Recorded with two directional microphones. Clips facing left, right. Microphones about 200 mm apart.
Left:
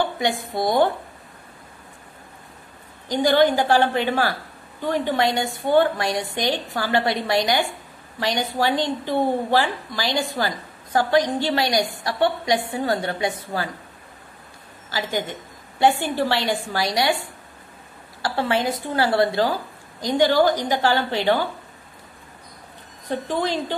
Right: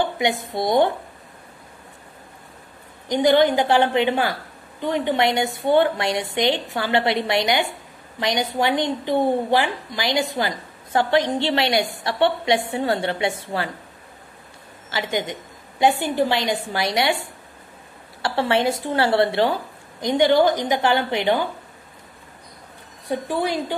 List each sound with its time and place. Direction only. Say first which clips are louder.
3.1 s a woman's voice: right 1 dB; 20° right (ahead or behind)
14.9 s a woman's voice: right 1 dB; 20° right (ahead or behind)
23.0 s a woman's voice: right 1 dB; 10° right (ahead or behind)